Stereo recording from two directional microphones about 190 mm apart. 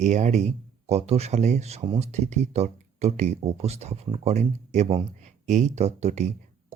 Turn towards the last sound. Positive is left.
turn(degrees=-35)  # may be behind; listen again after turning